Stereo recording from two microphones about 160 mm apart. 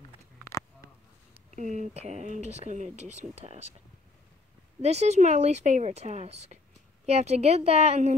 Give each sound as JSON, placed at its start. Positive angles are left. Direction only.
{"t": 1.5, "sound": "speech", "side_deg": -50}
{"t": 4.8, "sound": "speech", "side_deg": -45}